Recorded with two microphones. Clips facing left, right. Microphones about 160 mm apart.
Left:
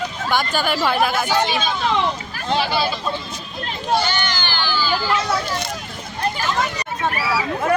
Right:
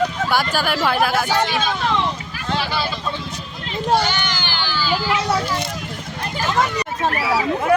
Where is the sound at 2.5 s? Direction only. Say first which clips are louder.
Left 3 dB; 15° left (ahead or behind).